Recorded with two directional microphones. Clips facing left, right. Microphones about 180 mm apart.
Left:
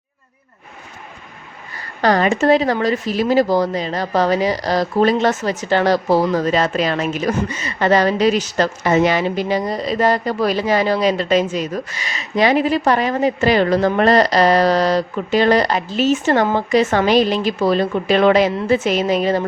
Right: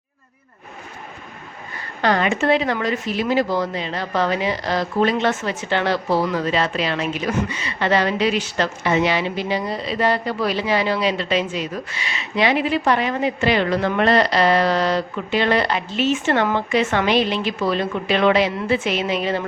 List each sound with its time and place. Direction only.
2.0 s speech: 40° left (ahead or behind)